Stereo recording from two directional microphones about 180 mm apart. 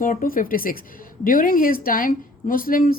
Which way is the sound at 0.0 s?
50° left (ahead or behind).